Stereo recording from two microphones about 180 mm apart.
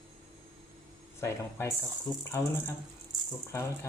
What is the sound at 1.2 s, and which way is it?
Speech, 15° left (ahead or behind).